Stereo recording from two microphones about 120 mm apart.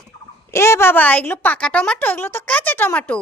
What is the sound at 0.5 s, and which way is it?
A woman's voice, 20° left (ahead or behind).